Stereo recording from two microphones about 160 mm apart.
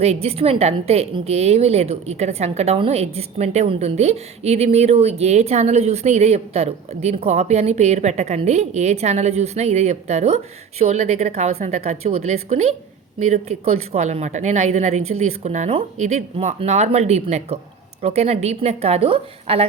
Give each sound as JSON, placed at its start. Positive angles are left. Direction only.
{"t": 0.0, "sound": "a woman's voice", "side_deg": -40}